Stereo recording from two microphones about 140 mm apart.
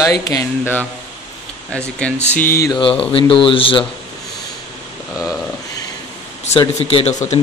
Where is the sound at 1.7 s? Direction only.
10° left (ahead or behind).